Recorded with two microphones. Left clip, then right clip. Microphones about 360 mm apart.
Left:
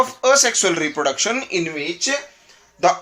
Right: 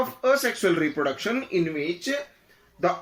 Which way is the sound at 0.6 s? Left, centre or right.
Centre.